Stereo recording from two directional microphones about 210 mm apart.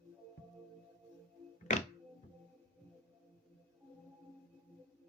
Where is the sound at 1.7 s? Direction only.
35° left (ahead or behind).